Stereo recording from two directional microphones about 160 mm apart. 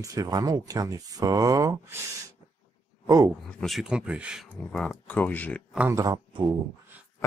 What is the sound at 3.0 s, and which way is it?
Speech, 25° right (ahead or behind).